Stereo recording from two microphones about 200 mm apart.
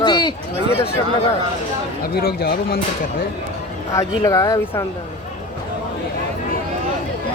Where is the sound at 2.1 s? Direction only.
50° left (ahead or behind).